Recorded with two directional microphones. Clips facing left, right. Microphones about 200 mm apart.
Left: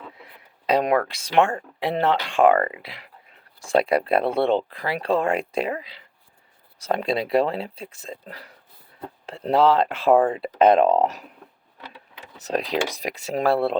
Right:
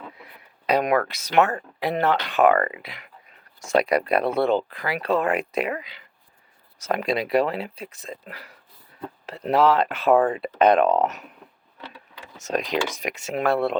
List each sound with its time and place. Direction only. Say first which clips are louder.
0.7 s speech: left 1 dB; 30° left (ahead or behind)